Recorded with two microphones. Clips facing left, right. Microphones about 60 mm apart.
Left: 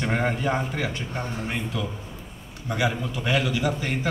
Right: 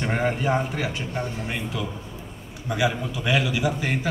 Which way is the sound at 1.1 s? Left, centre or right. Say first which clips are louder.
Right 1 dB; left.